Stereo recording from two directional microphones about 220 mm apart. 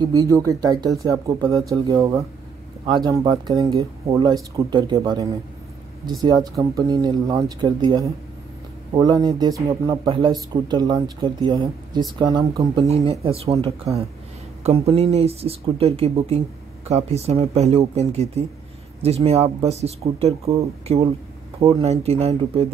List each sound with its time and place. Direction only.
0.0 s speech: 15° right (ahead or behind)
15.0 s speech: 30° right (ahead or behind)